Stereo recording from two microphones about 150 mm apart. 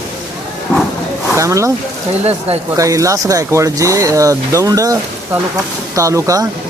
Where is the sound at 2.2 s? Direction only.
45° right (ahead or behind).